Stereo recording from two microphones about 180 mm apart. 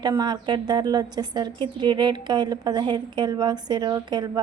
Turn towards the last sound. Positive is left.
turn(degrees=-25)  # may be behind; listen again after turning